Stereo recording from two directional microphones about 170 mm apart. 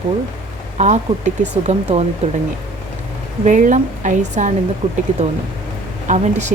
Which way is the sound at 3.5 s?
50° right (ahead or behind).